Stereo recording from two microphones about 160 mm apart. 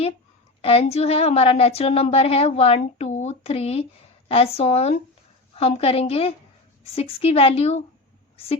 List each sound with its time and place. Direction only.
0.6 s a woman's voice: 40° left (ahead or behind)